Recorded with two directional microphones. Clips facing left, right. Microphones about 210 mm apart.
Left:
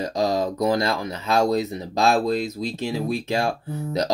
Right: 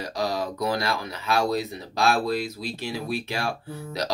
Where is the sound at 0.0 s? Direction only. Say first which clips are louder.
Left 5 dB; 20° left (ahead or behind).